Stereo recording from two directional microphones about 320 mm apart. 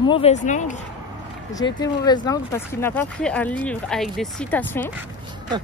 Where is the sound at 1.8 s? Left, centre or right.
Centre.